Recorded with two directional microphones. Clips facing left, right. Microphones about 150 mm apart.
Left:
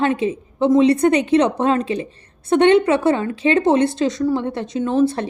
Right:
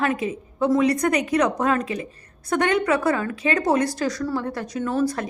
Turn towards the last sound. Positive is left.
turn(degrees=25)  # may be behind; listen again after turning